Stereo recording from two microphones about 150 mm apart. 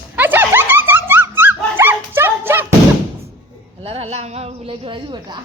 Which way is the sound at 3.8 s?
40° right (ahead or behind).